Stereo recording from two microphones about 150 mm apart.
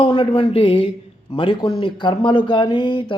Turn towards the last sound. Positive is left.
turn(degrees=35)  # may be behind; listen again after turning